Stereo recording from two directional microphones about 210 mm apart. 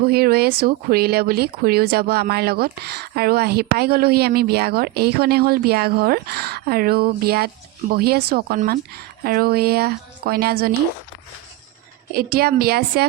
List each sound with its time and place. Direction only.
0.0 s speech: 45° right (ahead or behind)
12.1 s speech: 45° right (ahead or behind)